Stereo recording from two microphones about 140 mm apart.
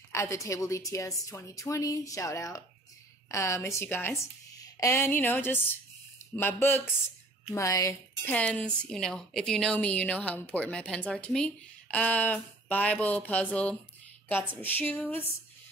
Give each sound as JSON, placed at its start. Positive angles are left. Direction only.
{"t": 0.1, "sound": "a woman's voice", "side_deg": 20}
{"t": 8.3, "sound": "a woman's voice", "side_deg": 10}